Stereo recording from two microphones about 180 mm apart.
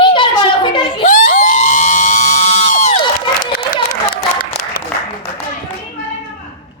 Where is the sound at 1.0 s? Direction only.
45° left (ahead or behind).